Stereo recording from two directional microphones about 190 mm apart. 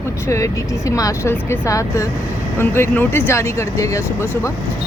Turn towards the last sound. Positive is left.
turn(degrees=15)  # may be behind; listen again after turning